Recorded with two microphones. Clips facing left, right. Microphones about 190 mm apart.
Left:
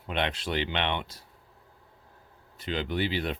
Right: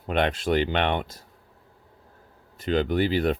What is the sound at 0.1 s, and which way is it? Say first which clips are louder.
Speech: right 7 dB; 50° right (ahead or behind).